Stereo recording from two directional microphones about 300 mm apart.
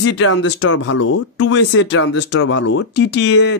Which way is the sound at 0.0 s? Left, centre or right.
Left.